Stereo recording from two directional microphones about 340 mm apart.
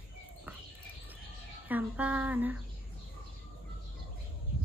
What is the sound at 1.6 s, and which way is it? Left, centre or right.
Speech, centre.